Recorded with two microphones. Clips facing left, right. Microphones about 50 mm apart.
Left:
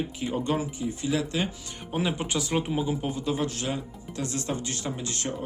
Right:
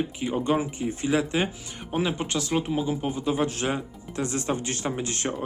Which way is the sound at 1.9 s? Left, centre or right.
Centre.